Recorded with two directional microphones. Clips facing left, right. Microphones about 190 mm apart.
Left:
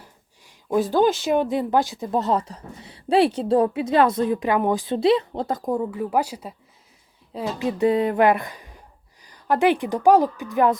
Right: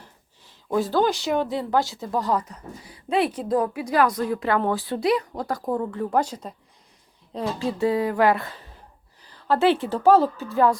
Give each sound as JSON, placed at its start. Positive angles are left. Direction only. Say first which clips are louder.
{"t": 0.0, "sound": "a sound", "louder": "left 1 dB", "side_deg": 15}
{"t": 1.2, "sound": "speech", "louder": "left 3 dB", "side_deg": 20}
{"t": 7.6, "sound": "a woman's voice", "louder": "left 3 dB", "side_deg": 20}